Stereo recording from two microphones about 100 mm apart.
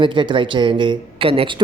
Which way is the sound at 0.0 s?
55° right (ahead or behind).